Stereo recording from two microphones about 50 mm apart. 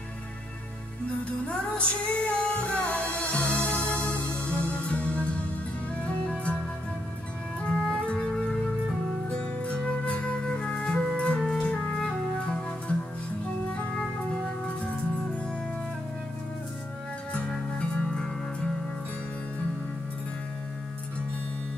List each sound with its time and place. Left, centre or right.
1.0 s music: left
7.6 s music: centre
9.3 s flute: centre
11.2 s music: left
17.5 s music: centre